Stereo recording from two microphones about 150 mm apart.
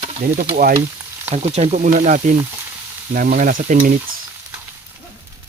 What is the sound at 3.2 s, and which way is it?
Frying, 75° right (ahead or behind).